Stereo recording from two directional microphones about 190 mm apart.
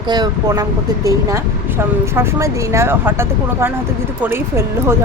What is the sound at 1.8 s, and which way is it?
Speech, 15° right (ahead or behind).